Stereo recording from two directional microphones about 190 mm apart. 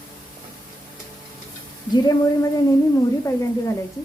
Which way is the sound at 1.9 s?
20° left (ahead or behind).